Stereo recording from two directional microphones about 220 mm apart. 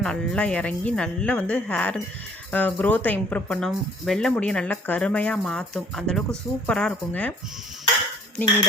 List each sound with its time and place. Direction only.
0.0 s speech: 5° left (ahead or behind)